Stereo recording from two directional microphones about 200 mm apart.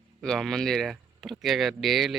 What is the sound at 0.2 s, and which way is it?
Speech, centre (ahead or behind).